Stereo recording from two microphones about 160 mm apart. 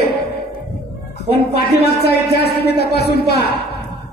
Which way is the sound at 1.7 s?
80° left.